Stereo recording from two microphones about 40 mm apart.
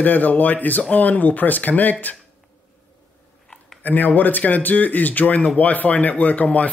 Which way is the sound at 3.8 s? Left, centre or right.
Left.